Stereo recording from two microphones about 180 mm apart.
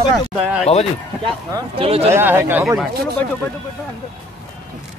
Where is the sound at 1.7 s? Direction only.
35° right (ahead or behind).